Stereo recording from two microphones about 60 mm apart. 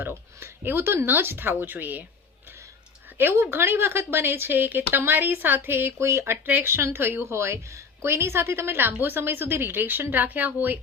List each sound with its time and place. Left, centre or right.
0.0 s speech: right
3.2 s a woman's voice: right
6.3 s a woman's voice: right